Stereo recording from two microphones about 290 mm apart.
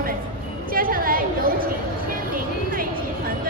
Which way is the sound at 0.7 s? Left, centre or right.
Right.